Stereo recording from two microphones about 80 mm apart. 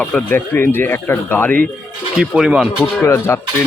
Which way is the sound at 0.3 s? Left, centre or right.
Left.